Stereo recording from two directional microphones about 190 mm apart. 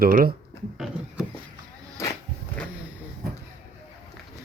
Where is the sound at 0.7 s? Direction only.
5° right (ahead or behind).